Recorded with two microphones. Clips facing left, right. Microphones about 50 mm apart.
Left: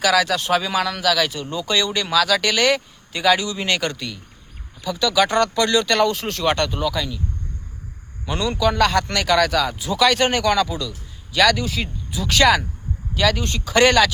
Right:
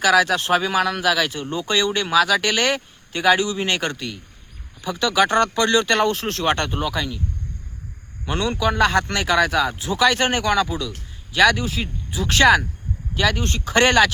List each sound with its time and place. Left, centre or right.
0.0 s speech: right
8.3 s a man's voice: right